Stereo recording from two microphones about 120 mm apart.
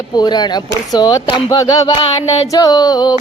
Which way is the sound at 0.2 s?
35° left (ahead or behind).